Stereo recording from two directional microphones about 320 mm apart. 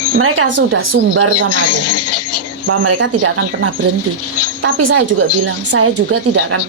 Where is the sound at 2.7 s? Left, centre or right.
Right.